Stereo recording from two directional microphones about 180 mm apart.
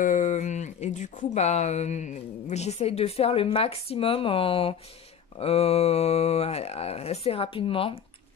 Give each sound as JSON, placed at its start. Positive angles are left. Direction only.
{"t": 0.0, "sound": "speech", "side_deg": 45}